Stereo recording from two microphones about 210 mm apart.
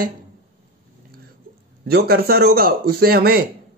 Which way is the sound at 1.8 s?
50° right (ahead or behind).